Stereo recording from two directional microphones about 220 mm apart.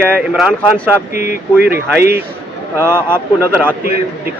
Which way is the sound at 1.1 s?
45° right (ahead or behind).